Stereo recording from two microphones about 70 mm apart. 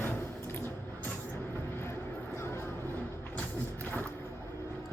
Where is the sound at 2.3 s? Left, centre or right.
Left.